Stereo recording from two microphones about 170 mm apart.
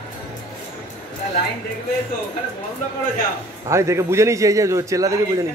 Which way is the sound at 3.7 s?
15° right (ahead or behind).